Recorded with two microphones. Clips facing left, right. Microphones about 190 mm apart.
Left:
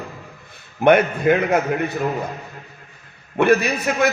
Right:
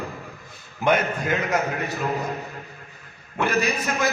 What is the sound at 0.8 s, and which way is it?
A man's voice, 60° left (ahead or behind).